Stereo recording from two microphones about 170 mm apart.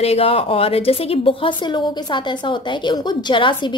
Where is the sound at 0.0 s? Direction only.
35° left (ahead or behind).